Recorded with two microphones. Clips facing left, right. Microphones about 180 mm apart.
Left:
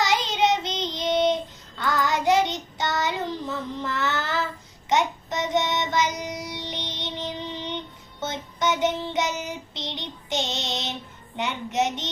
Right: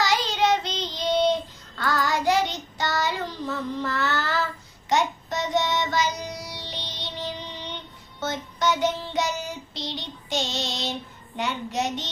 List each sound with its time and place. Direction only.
0.0 s child singing: 20° left (ahead or behind)
11.3 s a child's voice: 20° left (ahead or behind)